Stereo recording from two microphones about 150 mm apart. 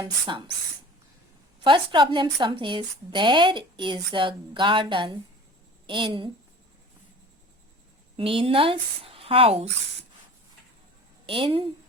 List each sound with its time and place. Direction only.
0.0 s a woman's voice: 35° right (ahead or behind)
1.6 s a woman's voice: 30° right (ahead or behind)
8.1 s speech: 35° right (ahead or behind)
11.3 s a woman's voice: 35° right (ahead or behind)